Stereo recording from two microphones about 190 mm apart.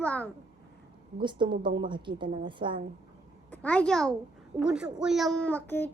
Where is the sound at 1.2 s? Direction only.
25° right (ahead or behind).